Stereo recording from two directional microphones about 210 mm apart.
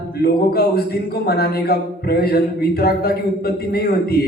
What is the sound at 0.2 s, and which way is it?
A man's voice, 45° left (ahead or behind).